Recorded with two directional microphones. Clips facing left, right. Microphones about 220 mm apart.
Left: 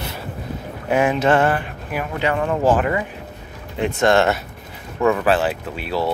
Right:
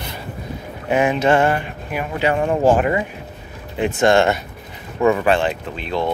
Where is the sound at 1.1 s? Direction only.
5° right (ahead or behind).